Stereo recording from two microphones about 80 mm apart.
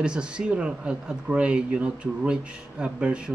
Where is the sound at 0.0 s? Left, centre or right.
Centre.